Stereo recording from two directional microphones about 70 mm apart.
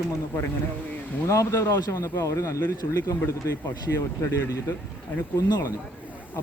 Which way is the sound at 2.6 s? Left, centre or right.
Left.